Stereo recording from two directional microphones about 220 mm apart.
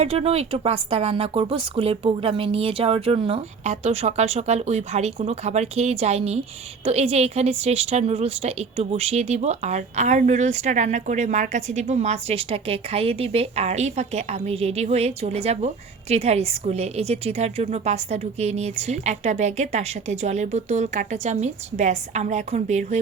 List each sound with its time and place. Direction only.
0.0 s a woman's voice: 25° right (ahead or behind)